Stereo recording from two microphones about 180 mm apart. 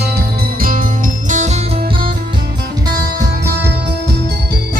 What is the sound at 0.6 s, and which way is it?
Music, 50° right (ahead or behind).